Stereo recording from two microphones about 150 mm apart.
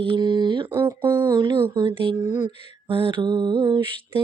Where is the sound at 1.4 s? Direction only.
30° right (ahead or behind).